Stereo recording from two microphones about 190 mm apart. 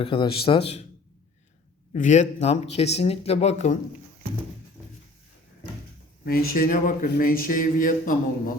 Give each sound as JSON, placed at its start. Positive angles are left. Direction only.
{"t": 0.0, "sound": "a man's voice", "side_deg": 30}
{"t": 1.9, "sound": "speech", "side_deg": 40}
{"t": 6.2, "sound": "speech", "side_deg": 50}